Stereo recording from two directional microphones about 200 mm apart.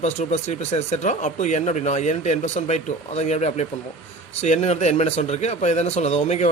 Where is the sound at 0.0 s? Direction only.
35° left (ahead or behind).